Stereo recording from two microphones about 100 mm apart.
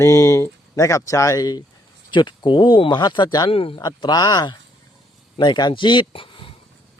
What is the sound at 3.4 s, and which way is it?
Speech, 65° left (ahead or behind).